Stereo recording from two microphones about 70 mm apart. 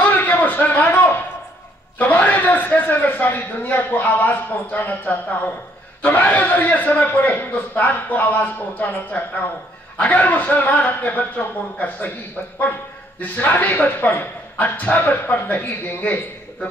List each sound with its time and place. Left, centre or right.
0.0 s a sound: left
2.0 s a man's voice: left
13.2 s a man's voice: left